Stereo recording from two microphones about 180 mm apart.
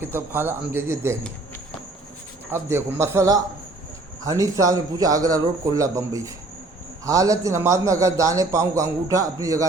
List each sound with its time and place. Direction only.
0.0 s a man's voice: 15° right (ahead or behind)
2.5 s a man's voice: 15° right (ahead or behind)